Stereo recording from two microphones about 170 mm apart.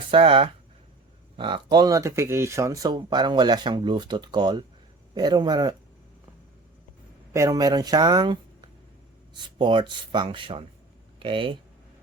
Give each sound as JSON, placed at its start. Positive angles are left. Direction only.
{"t": 0.1, "sound": "speech", "side_deg": -30}
{"t": 7.3, "sound": "speech", "side_deg": -20}